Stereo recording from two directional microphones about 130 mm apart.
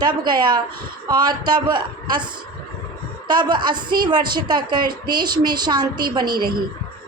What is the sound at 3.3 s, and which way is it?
A woman's voice, 35° right (ahead or behind).